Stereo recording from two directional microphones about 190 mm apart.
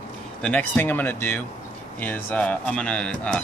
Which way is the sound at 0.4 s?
5° left (ahead or behind).